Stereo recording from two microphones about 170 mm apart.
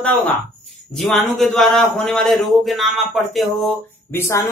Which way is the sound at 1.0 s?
Centre (ahead or behind).